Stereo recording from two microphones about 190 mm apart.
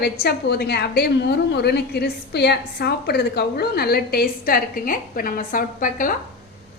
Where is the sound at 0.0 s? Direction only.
55° left (ahead or behind).